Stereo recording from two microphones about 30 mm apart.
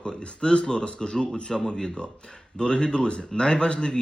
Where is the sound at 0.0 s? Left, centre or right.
Left.